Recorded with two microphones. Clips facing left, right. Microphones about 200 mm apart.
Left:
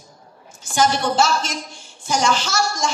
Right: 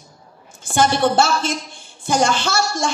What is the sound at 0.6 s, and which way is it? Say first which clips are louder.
Speech: right 3 dB; 55° right (ahead or behind).